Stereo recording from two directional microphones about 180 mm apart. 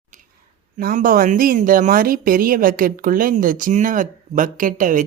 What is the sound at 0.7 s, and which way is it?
Speech, 50° right (ahead or behind).